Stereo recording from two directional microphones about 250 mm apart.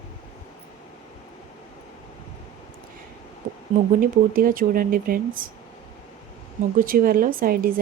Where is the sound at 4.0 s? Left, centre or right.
Right.